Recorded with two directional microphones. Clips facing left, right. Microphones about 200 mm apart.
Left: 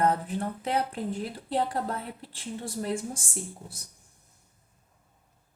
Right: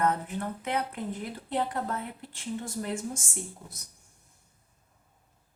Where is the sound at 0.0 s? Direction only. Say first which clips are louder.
Left 2 dB; 30° left (ahead or behind).